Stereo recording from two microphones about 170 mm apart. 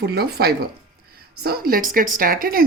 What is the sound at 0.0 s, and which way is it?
A woman's voice, 70° right (ahead or behind).